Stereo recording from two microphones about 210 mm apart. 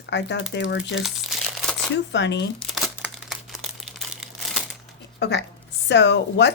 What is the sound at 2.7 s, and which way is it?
Crumpling, centre (ahead or behind).